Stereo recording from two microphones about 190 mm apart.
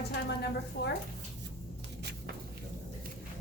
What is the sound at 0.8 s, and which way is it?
Speech, 60° left (ahead or behind).